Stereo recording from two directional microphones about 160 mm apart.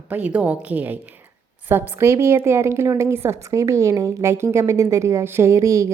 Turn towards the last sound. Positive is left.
turn(degrees=-20)  # may be behind; listen again after turning